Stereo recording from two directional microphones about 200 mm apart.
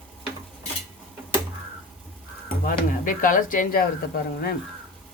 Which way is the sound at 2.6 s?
40° left (ahead or behind).